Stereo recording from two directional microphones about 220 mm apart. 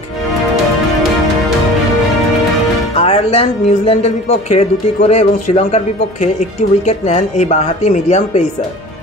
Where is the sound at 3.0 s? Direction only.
25° left (ahead or behind).